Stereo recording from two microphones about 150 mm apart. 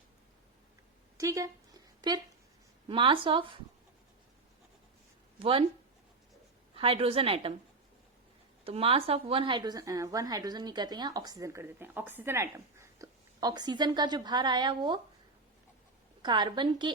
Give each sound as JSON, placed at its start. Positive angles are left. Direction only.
{"t": 1.2, "sound": "a sound", "side_deg": -20}
{"t": 2.8, "sound": "speech", "side_deg": -35}
{"t": 5.4, "sound": "speech", "side_deg": -40}
{"t": 6.7, "sound": "speech", "side_deg": -40}
{"t": 8.6, "sound": "speech", "side_deg": -40}
{"t": 16.2, "sound": "speech", "side_deg": -30}